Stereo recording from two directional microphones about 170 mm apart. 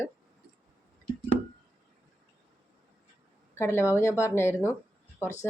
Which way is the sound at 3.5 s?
15° left (ahead or behind).